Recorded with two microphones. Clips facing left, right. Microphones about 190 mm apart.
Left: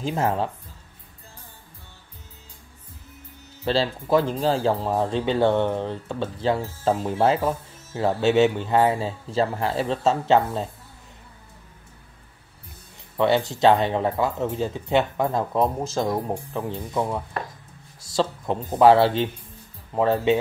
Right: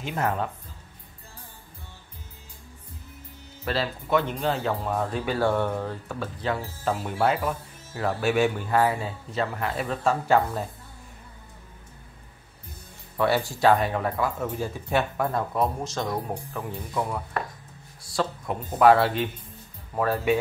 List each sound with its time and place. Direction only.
0.0 s speech: 25° left (ahead or behind)
3.6 s speech: 30° left (ahead or behind)
13.2 s speech: 20° left (ahead or behind)